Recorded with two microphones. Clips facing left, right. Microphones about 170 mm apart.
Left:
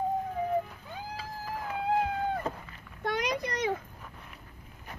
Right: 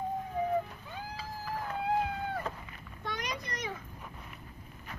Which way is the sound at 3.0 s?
75° left (ahead or behind).